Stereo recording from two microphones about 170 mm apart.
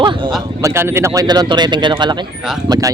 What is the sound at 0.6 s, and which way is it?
Speech, 15° right (ahead or behind).